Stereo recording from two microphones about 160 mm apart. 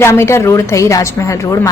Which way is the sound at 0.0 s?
15° left (ahead or behind).